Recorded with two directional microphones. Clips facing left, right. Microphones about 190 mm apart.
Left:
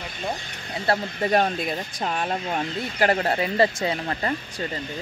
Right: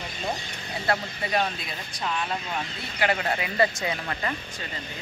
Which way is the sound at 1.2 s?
45° left (ahead or behind).